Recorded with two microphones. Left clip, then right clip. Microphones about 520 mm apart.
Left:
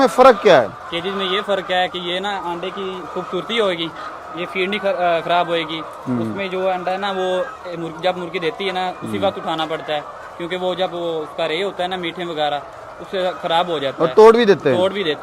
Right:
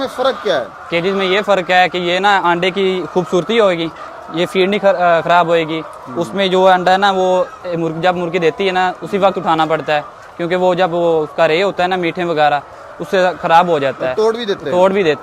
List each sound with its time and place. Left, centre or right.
0.0 s a man's voice: left
0.9 s a man's voice: right
3.5 s speech: right
4.4 s a man's voice: right
14.2 s a man's voice: left
14.8 s speech: right